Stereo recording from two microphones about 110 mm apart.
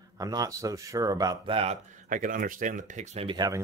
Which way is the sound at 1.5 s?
55° right (ahead or behind).